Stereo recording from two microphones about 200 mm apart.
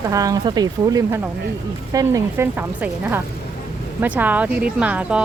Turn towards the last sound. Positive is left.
turn(degrees=-5)  # may be behind; listen again after turning